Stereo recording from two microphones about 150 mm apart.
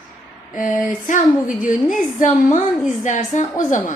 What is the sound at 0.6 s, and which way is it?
A woman's voice, 60° left (ahead or behind).